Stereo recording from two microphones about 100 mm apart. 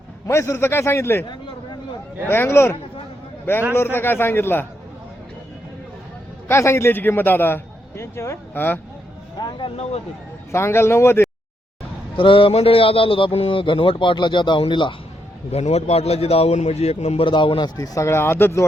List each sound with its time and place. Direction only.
0.3 s a man's voice: 25° left (ahead or behind)
2.2 s a man's voice: 25° left (ahead or behind)
6.5 s a man's voice: 25° left (ahead or behind)
9.4 s speech: 50° left (ahead or behind)
9.7 s speech: 85° left
10.5 s a man's voice: 25° left (ahead or behind)
12.1 s a man's voice: 60° left (ahead or behind)
15.5 s a man's voice: 90° left; by 17.7 s 55° left (ahead or behind)
17.7 s a man's voice: 35° left (ahead or behind)